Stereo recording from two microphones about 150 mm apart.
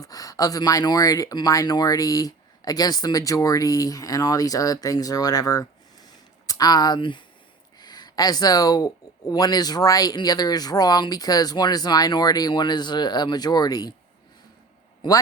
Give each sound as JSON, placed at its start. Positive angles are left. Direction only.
{"t": 0.0, "sound": "speech", "side_deg": 25}